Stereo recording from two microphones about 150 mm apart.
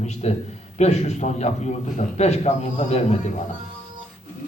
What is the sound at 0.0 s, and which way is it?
Speech, 50° left (ahead or behind).